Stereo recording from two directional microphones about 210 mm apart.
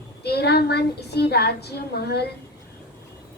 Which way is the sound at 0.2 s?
50° left (ahead or behind).